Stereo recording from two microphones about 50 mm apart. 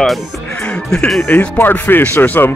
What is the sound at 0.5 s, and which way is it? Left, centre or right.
Music, left.